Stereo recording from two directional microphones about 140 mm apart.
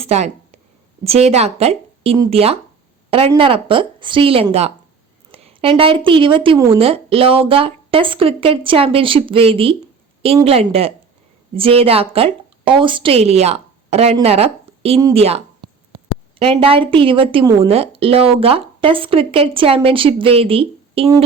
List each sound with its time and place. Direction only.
0.0 s a woman's voice: 50° right (ahead or behind)
17.4 s speech: 25° right (ahead or behind)
17.7 s speech: 45° right (ahead or behind)